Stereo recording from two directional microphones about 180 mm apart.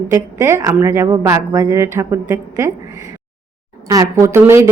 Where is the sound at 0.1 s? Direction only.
15° right (ahead or behind).